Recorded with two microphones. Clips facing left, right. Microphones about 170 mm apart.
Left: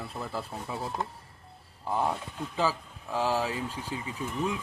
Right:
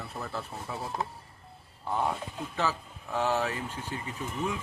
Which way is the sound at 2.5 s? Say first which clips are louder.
Left 3 dB; 10° left (ahead or behind).